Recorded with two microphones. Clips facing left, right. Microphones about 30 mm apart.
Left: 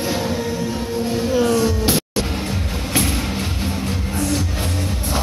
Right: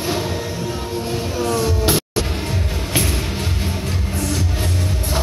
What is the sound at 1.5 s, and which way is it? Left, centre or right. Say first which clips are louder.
Music: left 1 dB; right.